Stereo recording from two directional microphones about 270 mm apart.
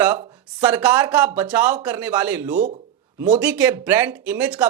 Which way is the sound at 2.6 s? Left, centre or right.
Right.